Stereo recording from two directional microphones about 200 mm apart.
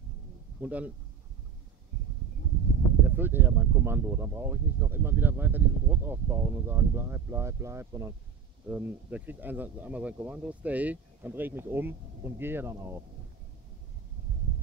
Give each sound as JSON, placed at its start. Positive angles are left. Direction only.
{"t": 0.6, "sound": "speech", "side_deg": -5}
{"t": 3.2, "sound": "speech", "side_deg": -10}